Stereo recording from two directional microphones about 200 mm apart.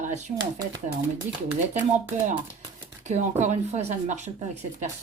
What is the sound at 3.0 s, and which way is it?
Speech, 35° right (ahead or behind).